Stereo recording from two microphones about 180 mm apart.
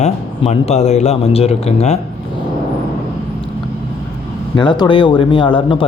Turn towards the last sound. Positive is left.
turn(degrees=25)  # may be behind; listen again after turning